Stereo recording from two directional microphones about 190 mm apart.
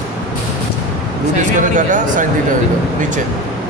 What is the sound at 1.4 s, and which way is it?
Speech, 40° right (ahead or behind).